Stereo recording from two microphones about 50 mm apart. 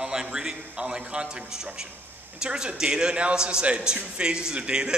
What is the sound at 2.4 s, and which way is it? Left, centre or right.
A man's voice, centre.